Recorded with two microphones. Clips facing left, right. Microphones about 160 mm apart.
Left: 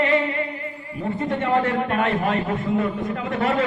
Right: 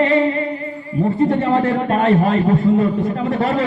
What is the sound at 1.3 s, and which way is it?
Speech, 30° right (ahead or behind).